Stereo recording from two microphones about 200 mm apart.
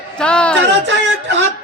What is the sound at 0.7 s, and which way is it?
Speech, 65° right (ahead or behind).